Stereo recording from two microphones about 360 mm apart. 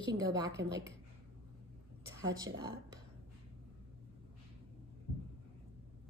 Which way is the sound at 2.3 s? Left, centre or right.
Centre.